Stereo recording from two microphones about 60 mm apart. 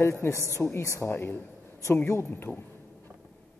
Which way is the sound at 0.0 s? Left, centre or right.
Left.